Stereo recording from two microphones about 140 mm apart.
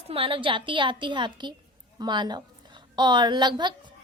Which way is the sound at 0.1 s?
40° right (ahead or behind).